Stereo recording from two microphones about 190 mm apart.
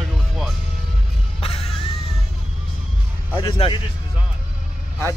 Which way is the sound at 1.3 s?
30° left (ahead or behind).